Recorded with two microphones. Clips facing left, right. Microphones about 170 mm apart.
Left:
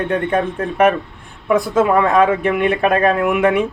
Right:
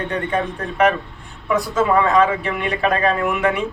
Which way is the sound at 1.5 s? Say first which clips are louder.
Left 3 dB; 55° left (ahead or behind).